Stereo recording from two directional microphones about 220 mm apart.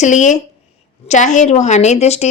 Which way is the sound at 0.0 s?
35° left (ahead or behind).